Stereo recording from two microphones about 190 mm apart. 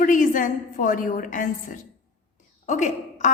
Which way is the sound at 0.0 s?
45° left (ahead or behind).